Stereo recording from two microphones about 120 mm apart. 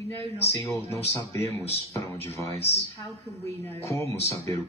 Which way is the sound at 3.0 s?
20° left (ahead or behind).